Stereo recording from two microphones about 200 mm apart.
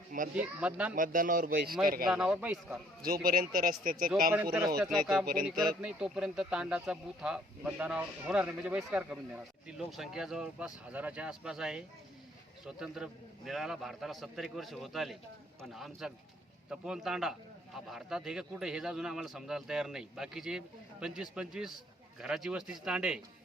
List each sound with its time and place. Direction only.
0.3 s speech: 5° right (ahead or behind)
0.9 s speech: 45° right (ahead or behind)
2.0 s speech: 5° right (ahead or behind)
3.0 s speech: 45° right (ahead or behind)
4.4 s speech: 15° right (ahead or behind)
4.8 s speech: centre (ahead or behind)
5.2 s speech: 45° right (ahead or behind)
5.8 s speech: 5° right (ahead or behind)